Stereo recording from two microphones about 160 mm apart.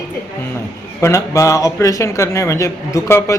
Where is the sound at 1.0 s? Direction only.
20° left (ahead or behind).